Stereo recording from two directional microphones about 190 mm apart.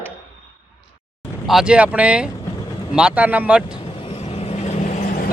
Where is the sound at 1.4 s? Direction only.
Centre (ahead or behind).